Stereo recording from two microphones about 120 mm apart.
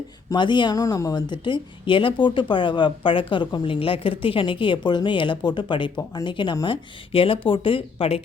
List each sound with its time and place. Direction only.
0.3 s speech: 40° left (ahead or behind)
6.0 s speech: 30° left (ahead or behind); by 8.2 s 50° left (ahead or behind)